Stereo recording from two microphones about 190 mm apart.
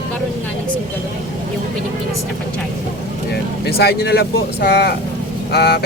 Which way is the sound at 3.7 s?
55° left (ahead or behind).